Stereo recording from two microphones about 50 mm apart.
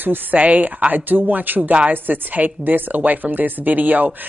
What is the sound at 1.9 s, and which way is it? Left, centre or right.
Speech, right.